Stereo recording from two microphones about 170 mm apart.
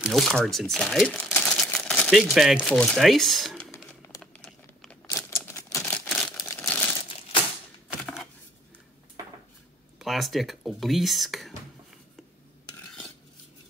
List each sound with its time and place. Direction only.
0.0 s crumpling: centre (ahead or behind)
2.3 s speech: centre (ahead or behind)
4.2 s a sound: centre (ahead or behind)
5.1 s typewriter: 10° left (ahead or behind)
5.9 s a sound: 5° left (ahead or behind)
6.5 s crumpling: 15° left (ahead or behind)
9.9 s speech: centre (ahead or behind)
12.7 s stir: 5° left (ahead or behind)